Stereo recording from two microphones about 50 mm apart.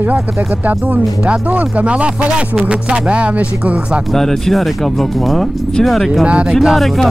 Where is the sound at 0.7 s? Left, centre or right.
Right.